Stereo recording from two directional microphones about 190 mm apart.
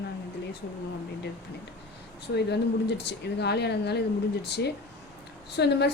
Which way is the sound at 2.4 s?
60° left (ahead or behind).